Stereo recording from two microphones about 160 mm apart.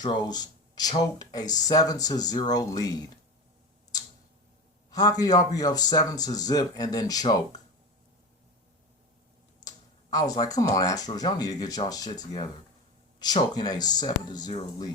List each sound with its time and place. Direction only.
0.0 s speech: 25° left (ahead or behind)
4.9 s speech: 25° left (ahead or behind)
9.6 s a sound: 25° left (ahead or behind)
10.4 s speech: 20° left (ahead or behind)